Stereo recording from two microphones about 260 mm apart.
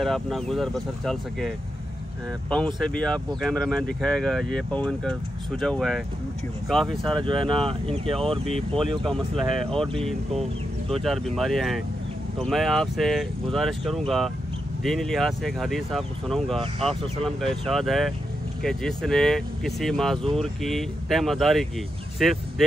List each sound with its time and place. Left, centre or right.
0.0 s speech: centre
2.5 s speech: centre
7.2 s speech: centre
8.5 s speech: centre
10.9 s speech: centre